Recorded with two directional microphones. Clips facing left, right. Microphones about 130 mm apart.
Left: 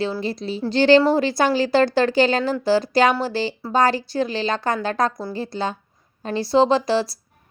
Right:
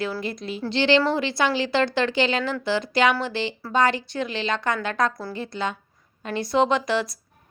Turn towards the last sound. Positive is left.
turn(degrees=30)  # may be behind; listen again after turning